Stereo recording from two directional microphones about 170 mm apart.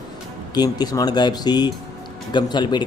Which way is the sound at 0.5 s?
25° left (ahead or behind).